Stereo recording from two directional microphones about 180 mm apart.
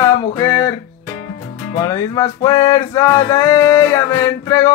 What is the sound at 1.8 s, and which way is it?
Male singing, 20° left (ahead or behind).